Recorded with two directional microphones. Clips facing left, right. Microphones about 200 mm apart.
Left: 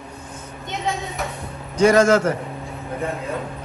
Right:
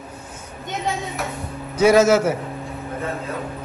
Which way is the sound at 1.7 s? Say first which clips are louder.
Even; 5° right (ahead or behind).